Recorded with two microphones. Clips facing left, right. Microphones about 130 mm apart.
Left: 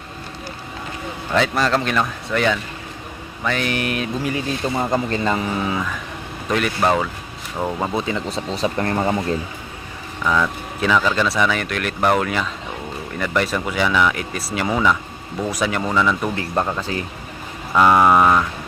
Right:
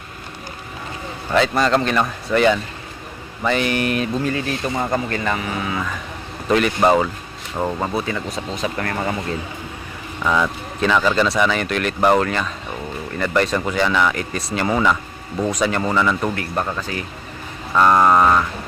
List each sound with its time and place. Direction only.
1.3 s speech: centre (ahead or behind)
4.3 s speech: 20° left (ahead or behind)
6.8 s speech: 5° right (ahead or behind)
7.9 s speech: 20° left (ahead or behind)
10.2 s speech: 10° right (ahead or behind)
16.3 s speech: 20° left (ahead or behind)
17.7 s vehicle: 10° left (ahead or behind)